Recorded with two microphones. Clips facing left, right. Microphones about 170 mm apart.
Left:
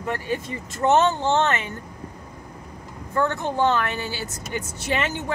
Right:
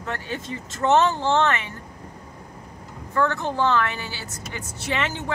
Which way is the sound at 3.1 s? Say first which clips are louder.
Even; 20° left (ahead or behind).